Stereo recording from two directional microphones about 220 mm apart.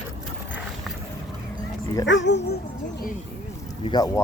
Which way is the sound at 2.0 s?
55° left (ahead or behind).